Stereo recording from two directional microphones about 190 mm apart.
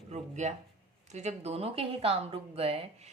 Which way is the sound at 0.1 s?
35° right (ahead or behind).